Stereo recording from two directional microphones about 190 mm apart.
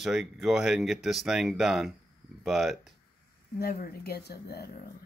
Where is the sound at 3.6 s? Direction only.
55° left (ahead or behind).